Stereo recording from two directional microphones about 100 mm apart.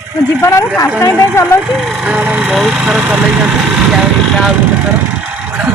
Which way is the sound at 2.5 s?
Centre (ahead or behind).